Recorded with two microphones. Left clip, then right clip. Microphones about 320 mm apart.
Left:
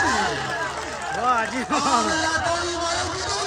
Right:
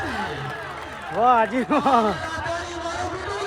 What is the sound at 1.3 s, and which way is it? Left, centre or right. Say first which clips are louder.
Speech: right 4 dB; centre.